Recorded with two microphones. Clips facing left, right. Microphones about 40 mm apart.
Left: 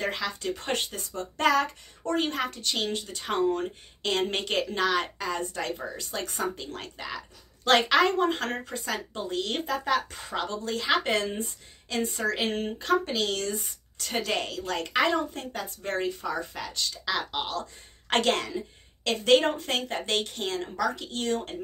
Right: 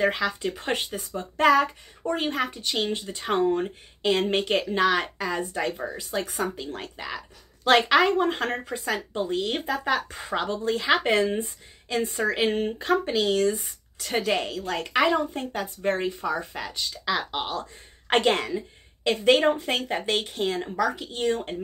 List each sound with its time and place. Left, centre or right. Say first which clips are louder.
0.0 s a woman's voice: right 6 dB; centre